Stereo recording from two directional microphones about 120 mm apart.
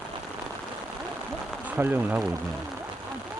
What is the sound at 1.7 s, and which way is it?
Speech, 15° right (ahead or behind).